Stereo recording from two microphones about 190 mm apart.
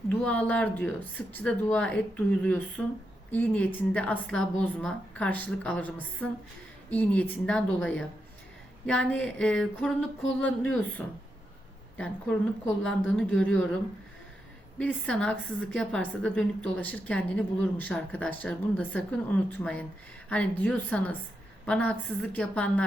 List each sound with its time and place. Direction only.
0.1 s a woman's voice: 5° left (ahead or behind)
14.8 s a woman's voice: 5° left (ahead or behind)